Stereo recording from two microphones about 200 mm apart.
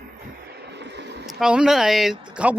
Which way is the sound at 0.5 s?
55° right (ahead or behind).